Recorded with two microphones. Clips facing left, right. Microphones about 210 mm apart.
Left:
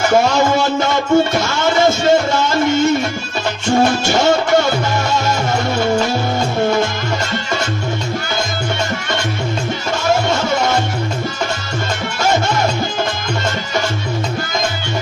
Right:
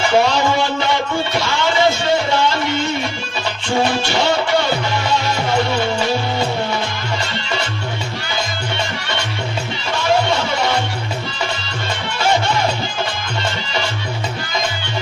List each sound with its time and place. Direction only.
0.0 s music: 45° left (ahead or behind)
10.0 s music: 45° left (ahead or behind)